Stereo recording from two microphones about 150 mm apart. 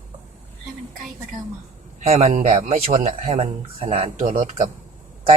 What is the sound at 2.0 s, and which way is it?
Speech, 45° right (ahead or behind).